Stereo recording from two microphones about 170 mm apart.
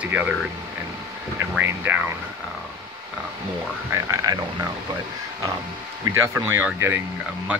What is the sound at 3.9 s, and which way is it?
Speech, 20° right (ahead or behind).